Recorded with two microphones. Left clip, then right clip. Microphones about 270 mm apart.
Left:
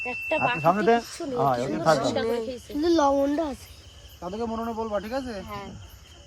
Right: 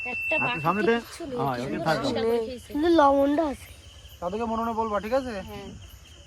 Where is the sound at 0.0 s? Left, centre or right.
Left.